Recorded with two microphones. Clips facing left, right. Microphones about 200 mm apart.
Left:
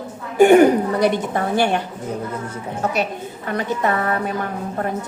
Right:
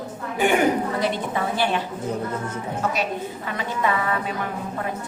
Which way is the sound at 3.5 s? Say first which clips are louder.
Left 5 dB; 45° left (ahead or behind).